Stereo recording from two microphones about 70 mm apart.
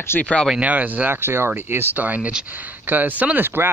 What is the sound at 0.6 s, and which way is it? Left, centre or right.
Speech, right.